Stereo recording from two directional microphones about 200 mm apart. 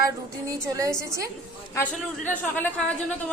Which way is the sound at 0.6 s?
15° right (ahead or behind).